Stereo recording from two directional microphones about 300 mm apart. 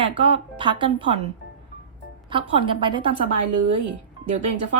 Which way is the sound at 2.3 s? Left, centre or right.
Centre.